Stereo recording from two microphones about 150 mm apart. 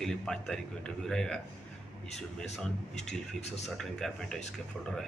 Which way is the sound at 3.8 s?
5° left (ahead or behind).